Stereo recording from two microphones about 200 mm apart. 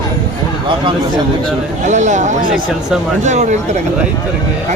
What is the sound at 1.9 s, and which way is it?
Speech, 35° right (ahead or behind).